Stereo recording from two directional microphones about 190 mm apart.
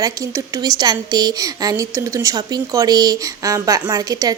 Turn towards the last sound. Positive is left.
turn(degrees=-20)  # may be behind; listen again after turning